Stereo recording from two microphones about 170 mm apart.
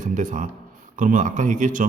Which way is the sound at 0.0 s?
50° right (ahead or behind).